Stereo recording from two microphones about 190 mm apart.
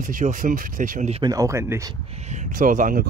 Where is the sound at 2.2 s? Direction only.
40° right (ahead or behind).